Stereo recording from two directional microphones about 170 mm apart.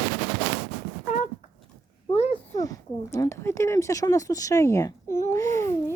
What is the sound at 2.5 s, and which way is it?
A child's voice, 20° left (ahead or behind).